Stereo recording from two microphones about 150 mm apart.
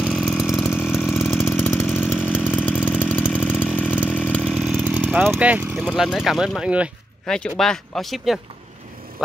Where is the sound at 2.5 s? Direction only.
10° left (ahead or behind).